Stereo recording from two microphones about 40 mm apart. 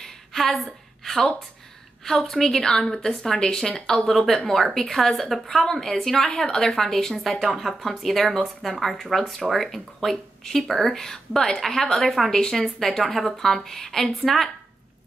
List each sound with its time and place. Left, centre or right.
0.0 s a sound: centre
1.0 s a woman's voice: centre
12.3 s a woman's voice: centre
12.5 s speech: centre